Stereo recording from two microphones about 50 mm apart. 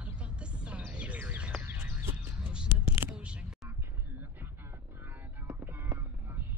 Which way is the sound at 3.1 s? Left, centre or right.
Right.